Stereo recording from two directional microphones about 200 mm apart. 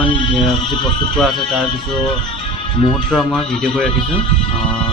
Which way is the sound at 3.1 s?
5° left (ahead or behind).